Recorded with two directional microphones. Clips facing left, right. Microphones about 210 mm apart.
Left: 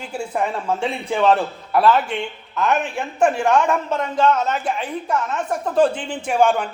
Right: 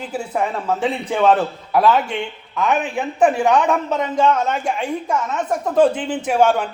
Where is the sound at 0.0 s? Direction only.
5° right (ahead or behind).